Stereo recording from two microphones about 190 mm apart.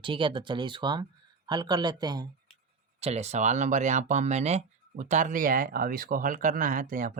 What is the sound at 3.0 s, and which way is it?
Speech, 35° right (ahead or behind).